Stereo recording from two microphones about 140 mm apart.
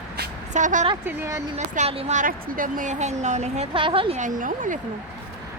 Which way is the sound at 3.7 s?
40° right (ahead or behind).